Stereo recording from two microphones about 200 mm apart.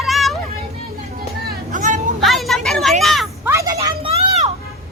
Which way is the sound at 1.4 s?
40° right (ahead or behind).